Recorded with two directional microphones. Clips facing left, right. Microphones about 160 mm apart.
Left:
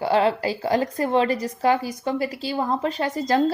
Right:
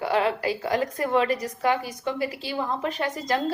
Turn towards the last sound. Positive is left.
turn(degrees=35)  # may be behind; listen again after turning